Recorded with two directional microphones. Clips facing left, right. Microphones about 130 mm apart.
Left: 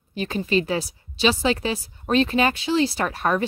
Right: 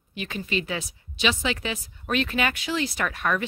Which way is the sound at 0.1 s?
35° left (ahead or behind).